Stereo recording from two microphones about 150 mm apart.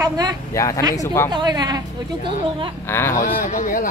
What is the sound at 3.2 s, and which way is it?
Speech, 65° left (ahead or behind).